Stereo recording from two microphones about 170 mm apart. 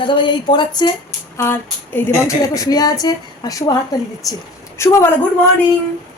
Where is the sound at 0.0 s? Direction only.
30° left (ahead or behind).